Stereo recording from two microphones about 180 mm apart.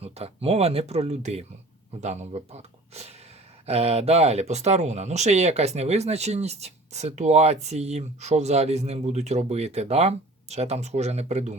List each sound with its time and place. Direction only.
0.0 s speech: 35° right (ahead or behind)